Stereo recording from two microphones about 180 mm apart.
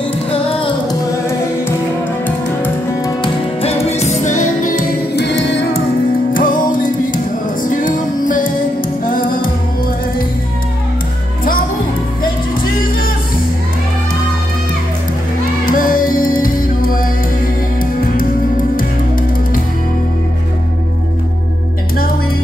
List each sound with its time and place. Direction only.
0.3 s music: 30° left (ahead or behind)
2.2 s music: 10° left (ahead or behind)
3.2 s music: 35° left (ahead or behind)
5.1 s music: 80° left
6.3 s music: 50° left (ahead or behind)
15.6 s music: 50° left (ahead or behind)
18.8 s music: 50° left (ahead or behind)